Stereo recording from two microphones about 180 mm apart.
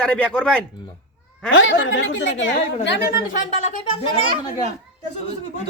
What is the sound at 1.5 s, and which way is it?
Speech, 90° left.